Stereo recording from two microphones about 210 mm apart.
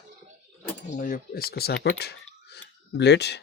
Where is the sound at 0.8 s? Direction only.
40° left (ahead or behind).